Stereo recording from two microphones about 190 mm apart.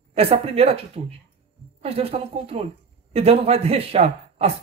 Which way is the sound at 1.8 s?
30° right (ahead or behind).